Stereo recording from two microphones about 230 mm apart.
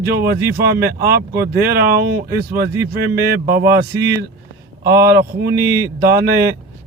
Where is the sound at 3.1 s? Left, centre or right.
Right.